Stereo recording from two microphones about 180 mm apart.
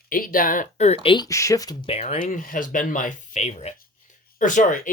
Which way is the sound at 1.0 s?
25° left (ahead or behind).